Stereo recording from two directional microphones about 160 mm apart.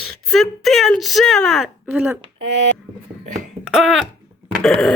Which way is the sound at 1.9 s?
15° right (ahead or behind).